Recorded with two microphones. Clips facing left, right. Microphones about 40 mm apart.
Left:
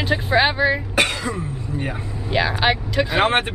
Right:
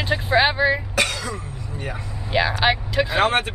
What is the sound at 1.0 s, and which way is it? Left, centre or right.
Throat clearing, left.